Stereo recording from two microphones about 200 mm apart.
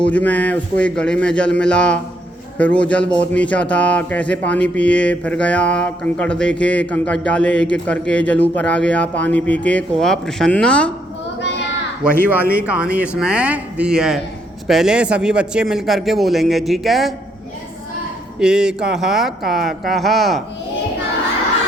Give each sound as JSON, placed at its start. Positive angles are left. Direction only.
{"t": 0.0, "sound": "a man's voice", "side_deg": 5}
{"t": 12.6, "sound": "a man's voice", "side_deg": -5}
{"t": 18.3, "sound": "a man's voice", "side_deg": -5}